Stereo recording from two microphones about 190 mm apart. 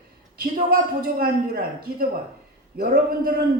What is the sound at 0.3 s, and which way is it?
A man's voice, 50° right (ahead or behind).